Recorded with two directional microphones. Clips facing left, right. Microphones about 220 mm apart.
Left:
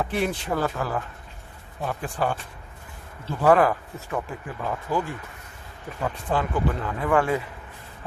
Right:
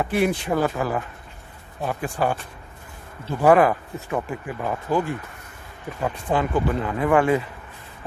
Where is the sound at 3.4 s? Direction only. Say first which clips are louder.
Right 2 dB; 15° right (ahead or behind).